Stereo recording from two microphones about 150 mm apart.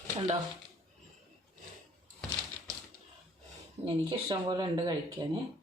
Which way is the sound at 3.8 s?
30° right (ahead or behind).